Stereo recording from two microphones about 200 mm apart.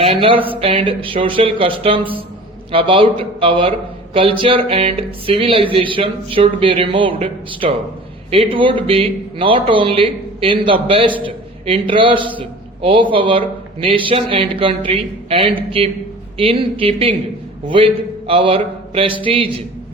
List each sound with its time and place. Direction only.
0.0 s a man's voice: 25° right (ahead or behind)
18.3 s a man's voice: 25° right (ahead or behind)